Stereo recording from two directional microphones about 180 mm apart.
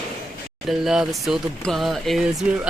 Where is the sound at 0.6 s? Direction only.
Centre (ahead or behind).